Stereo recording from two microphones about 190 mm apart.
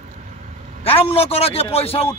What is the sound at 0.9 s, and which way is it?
Speech, 30° left (ahead or behind).